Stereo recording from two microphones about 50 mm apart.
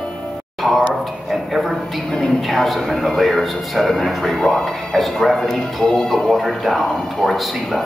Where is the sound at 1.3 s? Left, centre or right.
Centre.